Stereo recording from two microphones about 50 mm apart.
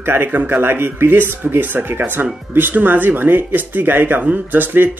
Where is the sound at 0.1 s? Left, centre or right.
Right.